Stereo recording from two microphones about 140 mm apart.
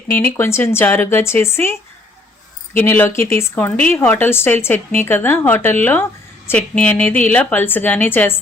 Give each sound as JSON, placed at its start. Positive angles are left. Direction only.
{"t": 0.1, "sound": "a woman's voice", "side_deg": 15}
{"t": 2.7, "sound": "a woman's voice", "side_deg": 15}